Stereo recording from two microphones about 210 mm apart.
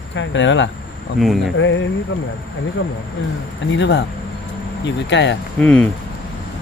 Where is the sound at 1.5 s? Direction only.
65° left (ahead or behind).